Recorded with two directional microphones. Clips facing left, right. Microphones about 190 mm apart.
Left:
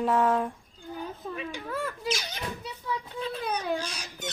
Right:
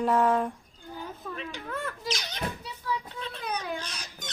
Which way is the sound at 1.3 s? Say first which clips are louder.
Left 2 dB; 10° left (ahead or behind).